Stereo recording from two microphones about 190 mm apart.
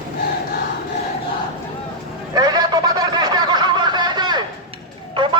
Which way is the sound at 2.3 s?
20° right (ahead or behind).